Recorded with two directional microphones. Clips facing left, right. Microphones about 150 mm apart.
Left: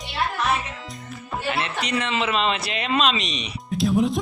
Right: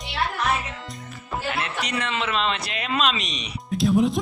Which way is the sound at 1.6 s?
Centre (ahead or behind).